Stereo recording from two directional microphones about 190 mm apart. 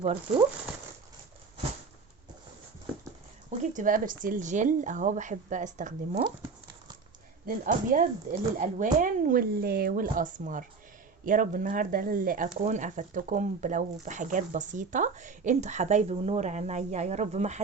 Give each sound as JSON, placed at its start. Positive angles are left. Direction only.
{"t": 0.0, "sound": "speech", "side_deg": -35}
{"t": 3.6, "sound": "speech", "side_deg": -45}
{"t": 7.4, "sound": "speech", "side_deg": -45}